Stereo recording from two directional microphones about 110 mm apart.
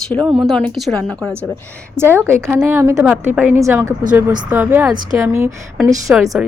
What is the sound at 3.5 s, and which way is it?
A woman's voice, 25° right (ahead or behind).